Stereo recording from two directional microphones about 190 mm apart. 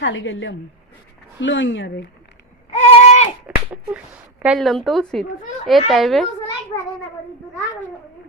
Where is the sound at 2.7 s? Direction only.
35° left (ahead or behind).